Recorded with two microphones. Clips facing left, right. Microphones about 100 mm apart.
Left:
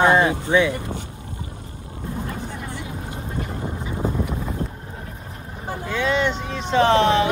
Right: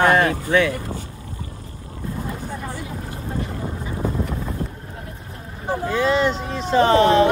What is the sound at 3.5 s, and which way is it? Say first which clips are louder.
Boat: even; 20° left (ahead or behind).